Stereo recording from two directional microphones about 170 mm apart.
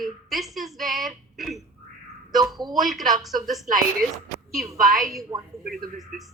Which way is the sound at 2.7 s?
Centre (ahead or behind).